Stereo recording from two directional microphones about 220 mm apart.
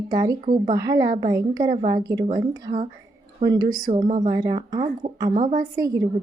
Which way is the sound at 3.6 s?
40° right (ahead or behind).